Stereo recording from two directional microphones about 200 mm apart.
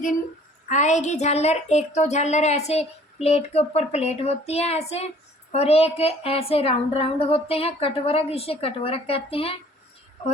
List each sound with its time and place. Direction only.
0.7 s a woman's voice: 35° left (ahead or behind)